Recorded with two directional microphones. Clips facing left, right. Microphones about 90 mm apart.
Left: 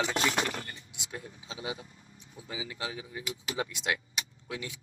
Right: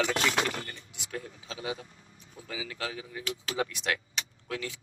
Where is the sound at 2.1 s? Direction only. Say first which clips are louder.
Right 1 dB; 20° left (ahead or behind).